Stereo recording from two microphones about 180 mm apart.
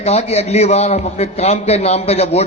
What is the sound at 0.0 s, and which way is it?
A man's voice, 35° left (ahead or behind).